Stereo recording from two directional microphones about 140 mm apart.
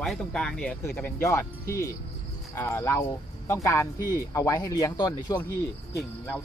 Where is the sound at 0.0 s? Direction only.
5° left (ahead or behind); by 5.4 s 25° left (ahead or behind).